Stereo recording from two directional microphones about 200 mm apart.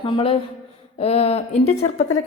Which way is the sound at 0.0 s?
25° left (ahead or behind).